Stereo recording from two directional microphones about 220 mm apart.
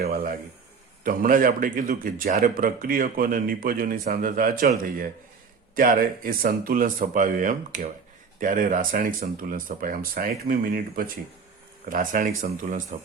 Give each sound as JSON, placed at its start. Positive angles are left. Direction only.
{"t": 0.0, "sound": "a man's voice", "side_deg": -40}